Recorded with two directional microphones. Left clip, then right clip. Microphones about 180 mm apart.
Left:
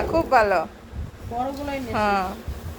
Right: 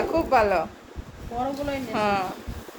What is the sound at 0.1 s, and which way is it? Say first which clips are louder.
Speech: left 3 dB; 10° left (ahead or behind).